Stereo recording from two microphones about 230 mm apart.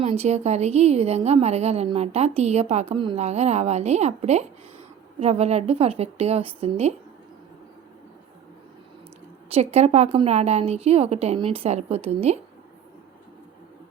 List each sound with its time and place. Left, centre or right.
0.0 s a woman's voice: right
9.5 s a woman's voice: right